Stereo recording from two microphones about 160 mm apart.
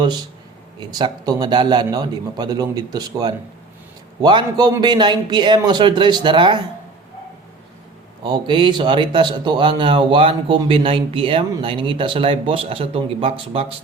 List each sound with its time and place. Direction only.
0.8 s speech: 25° right (ahead or behind)
8.2 s speech: 30° right (ahead or behind)